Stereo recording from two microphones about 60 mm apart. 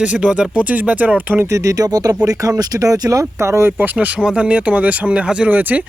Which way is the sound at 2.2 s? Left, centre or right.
Right.